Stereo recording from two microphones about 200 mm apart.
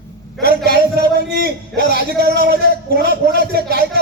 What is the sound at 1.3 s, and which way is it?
A man's voice, 50° right (ahead or behind).